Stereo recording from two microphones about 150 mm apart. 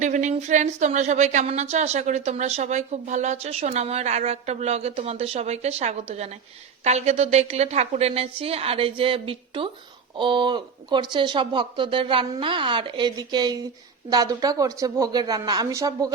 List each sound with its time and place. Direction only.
0.0 s a woman's voice: 50° right (ahead or behind); by 16.1 s 25° right (ahead or behind)